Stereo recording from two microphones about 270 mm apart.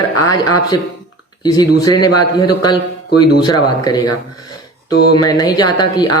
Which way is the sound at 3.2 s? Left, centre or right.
Centre.